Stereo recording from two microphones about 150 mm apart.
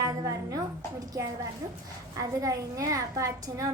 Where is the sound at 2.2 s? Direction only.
25° right (ahead or behind).